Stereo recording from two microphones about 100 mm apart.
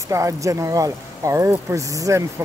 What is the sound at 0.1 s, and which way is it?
Speech, 30° right (ahead or behind).